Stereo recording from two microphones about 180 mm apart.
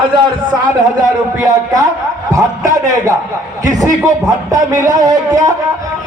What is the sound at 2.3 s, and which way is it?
A man's voice, 20° right (ahead or behind).